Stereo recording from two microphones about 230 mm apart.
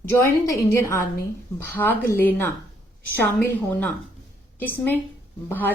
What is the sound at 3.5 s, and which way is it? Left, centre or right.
A woman's voice, centre.